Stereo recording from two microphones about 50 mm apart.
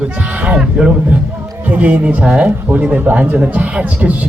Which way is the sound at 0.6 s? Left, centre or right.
Right.